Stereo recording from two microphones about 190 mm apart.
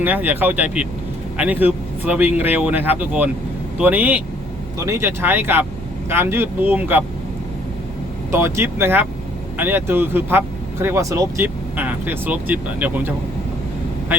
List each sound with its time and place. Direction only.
0.0 s speech: 10° right (ahead or behind)
8.3 s speech: 15° right (ahead or behind)